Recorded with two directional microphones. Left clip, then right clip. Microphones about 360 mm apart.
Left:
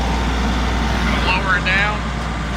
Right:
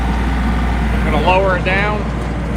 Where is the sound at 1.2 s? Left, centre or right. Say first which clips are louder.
Right 5 dB; centre.